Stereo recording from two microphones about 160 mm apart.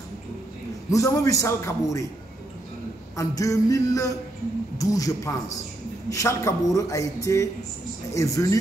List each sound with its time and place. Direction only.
0.8 s a man's voice: 20° left (ahead or behind)
3.2 s a man's voice: 20° left (ahead or behind)